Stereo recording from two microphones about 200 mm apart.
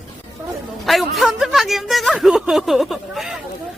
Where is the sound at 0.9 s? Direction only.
Centre (ahead or behind).